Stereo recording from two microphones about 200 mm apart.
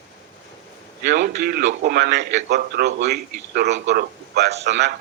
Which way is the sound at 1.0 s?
55° right (ahead or behind).